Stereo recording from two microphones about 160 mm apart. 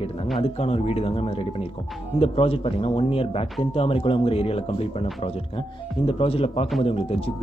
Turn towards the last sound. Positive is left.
turn(degrees=35)  # may be behind; listen again after turning